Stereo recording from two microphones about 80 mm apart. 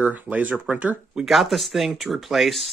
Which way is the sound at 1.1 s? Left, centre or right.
Centre.